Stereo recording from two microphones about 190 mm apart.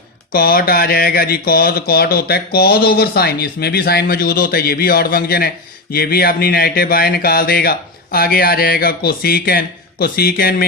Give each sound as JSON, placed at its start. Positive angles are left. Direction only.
{"t": 0.3, "sound": "speech", "side_deg": 50}